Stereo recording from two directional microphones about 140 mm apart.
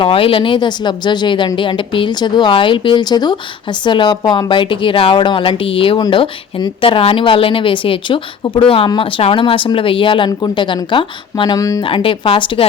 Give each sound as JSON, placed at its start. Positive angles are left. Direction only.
{"t": 0.0, "sound": "speech", "side_deg": 40}
{"t": 11.8, "sound": "speech", "side_deg": 40}